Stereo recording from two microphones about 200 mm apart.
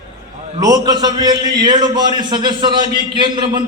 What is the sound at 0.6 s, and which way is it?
A man's voice, 20° right (ahead or behind).